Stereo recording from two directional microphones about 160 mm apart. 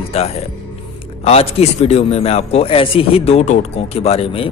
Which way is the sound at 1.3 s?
40° left (ahead or behind).